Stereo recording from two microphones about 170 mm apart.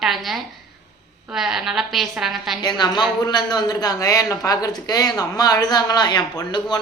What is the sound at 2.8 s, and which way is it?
Speech, 25° left (ahead or behind).